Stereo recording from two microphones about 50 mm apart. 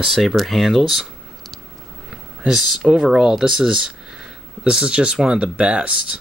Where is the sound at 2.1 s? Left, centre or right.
Centre.